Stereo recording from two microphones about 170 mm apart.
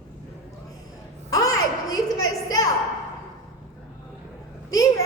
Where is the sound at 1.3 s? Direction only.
20° left (ahead or behind).